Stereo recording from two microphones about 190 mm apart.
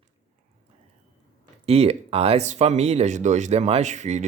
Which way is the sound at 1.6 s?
30° right (ahead or behind).